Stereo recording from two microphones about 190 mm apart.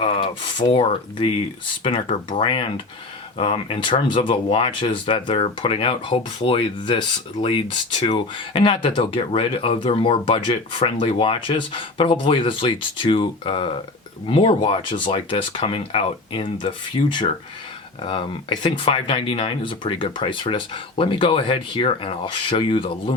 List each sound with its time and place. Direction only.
0.0 s speech: 25° left (ahead or behind)